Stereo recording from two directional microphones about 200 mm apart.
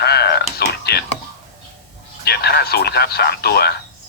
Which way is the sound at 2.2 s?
55° left (ahead or behind).